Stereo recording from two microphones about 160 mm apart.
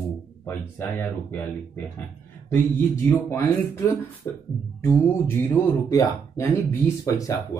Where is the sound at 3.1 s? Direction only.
15° left (ahead or behind).